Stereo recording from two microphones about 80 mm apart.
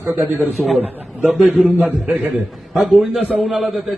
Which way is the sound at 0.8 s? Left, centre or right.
Centre.